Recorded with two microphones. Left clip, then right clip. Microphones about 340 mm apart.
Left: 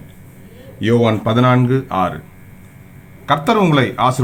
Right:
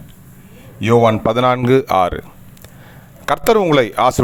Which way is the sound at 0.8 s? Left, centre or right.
Centre.